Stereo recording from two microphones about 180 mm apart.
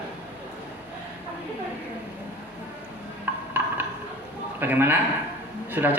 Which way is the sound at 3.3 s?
10° right (ahead or behind).